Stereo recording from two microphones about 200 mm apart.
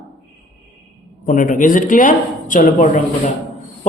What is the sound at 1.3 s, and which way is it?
A man's voice, 40° left (ahead or behind).